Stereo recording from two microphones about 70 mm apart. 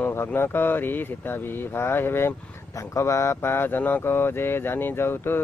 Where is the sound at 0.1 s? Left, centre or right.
Left.